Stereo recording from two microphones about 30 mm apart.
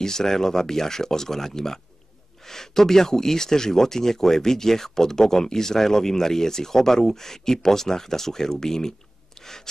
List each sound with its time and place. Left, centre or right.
0.0 s speech: centre